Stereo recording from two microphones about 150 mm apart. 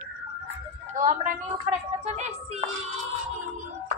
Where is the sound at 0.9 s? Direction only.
60° right (ahead or behind).